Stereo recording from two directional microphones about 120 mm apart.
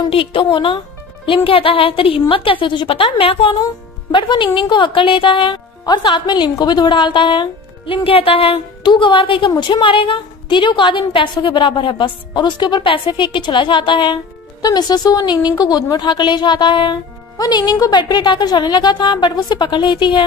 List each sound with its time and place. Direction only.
0.0 s a woman's voice: 50° left (ahead or behind)